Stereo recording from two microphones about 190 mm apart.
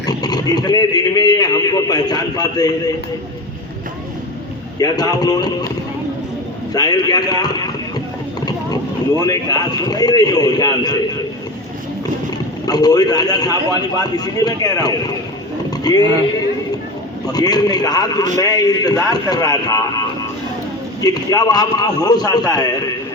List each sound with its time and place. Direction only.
0.0 s a man's voice: 20° left (ahead or behind)
4.8 s a man's voice: 20° left (ahead or behind)
6.7 s a man's voice: 20° left (ahead or behind)
12.6 s a man's voice: 20° left (ahead or behind)
17.3 s a man's voice: 20° left (ahead or behind)